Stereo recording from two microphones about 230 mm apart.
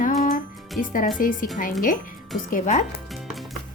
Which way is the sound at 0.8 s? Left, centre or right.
Left.